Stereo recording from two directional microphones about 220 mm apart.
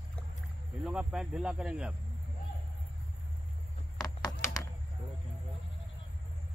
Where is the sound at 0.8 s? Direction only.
5° right (ahead or behind).